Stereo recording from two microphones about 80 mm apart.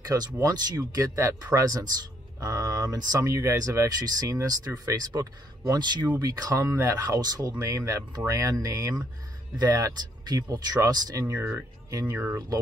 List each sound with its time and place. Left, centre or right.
0.0 s speech: right
3.3 s speech: right
6.6 s speech: right
6.9 s speech: right